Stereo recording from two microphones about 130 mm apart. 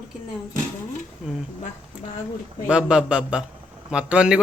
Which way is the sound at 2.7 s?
5° right (ahead or behind).